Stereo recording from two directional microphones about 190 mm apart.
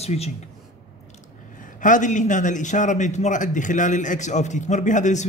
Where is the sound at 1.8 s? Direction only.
45° left (ahead or behind).